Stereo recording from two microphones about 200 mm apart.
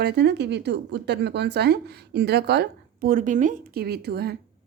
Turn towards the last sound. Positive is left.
turn(degrees=-55)  # may be behind; listen again after turning